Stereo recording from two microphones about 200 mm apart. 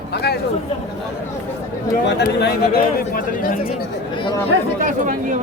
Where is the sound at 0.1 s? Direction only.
55° left (ahead or behind).